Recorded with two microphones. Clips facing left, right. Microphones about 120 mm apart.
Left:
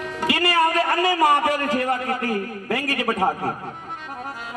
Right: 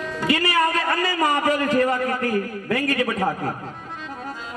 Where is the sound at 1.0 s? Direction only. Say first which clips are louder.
Left 3 dB; 65° left (ahead or behind).